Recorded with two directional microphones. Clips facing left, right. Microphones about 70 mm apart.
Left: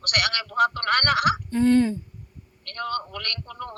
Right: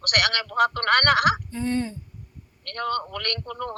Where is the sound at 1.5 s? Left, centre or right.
Left.